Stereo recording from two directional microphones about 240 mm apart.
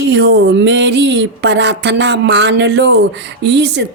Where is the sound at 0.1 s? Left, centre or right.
Right.